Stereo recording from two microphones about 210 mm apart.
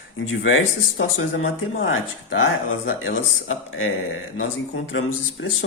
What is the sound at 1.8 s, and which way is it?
Speech, 65° left (ahead or behind).